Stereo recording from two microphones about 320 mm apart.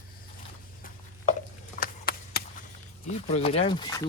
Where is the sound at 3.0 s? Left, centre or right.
Centre.